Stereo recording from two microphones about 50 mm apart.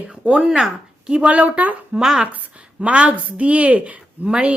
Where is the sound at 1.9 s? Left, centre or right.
Centre.